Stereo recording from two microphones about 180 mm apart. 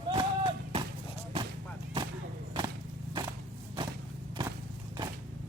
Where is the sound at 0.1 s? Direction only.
25° right (ahead or behind).